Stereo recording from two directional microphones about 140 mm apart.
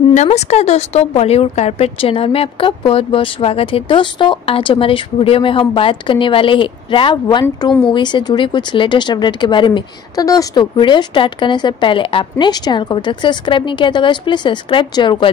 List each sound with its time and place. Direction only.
0.1 s speech: 55° left (ahead or behind); by 15.3 s 35° left (ahead or behind)